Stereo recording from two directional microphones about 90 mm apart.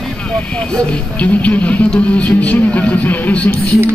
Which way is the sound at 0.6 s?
10° left (ahead or behind).